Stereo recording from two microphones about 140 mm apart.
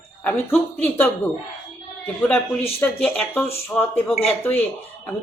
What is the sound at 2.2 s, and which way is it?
A woman's voice, 5° left (ahead or behind).